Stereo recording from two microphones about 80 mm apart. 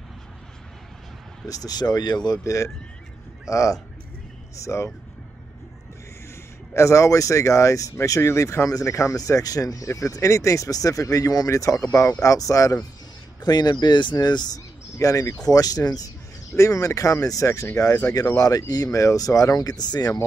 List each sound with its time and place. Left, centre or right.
1.5 s speech: left
6.7 s speech: left
13.4 s speech: left
15.0 s speech: left
16.5 s speech: left